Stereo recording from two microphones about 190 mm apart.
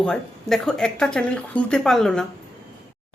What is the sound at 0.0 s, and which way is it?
Speech, centre (ahead or behind).